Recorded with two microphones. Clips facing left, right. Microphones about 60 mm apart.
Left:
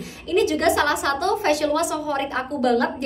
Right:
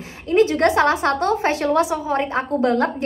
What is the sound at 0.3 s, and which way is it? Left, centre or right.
A woman's voice, right.